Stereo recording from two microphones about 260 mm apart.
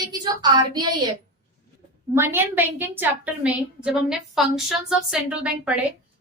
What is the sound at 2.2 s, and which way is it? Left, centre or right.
A woman's voice, centre.